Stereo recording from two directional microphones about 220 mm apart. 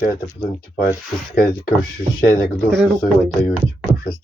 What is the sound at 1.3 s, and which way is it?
Speech, 40° left (ahead or behind).